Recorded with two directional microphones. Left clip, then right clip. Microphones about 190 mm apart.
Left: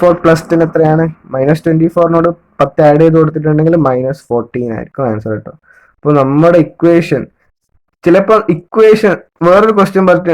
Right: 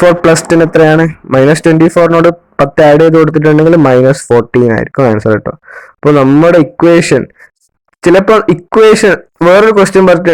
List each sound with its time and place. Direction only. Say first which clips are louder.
0.0 s speech: right 2 dB; 45° right (ahead or behind)